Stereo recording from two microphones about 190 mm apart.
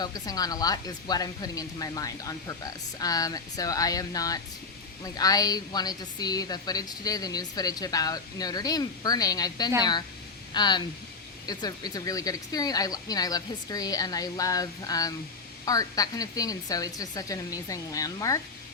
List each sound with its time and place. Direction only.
0.0 s a woman's voice: 20° left (ahead or behind)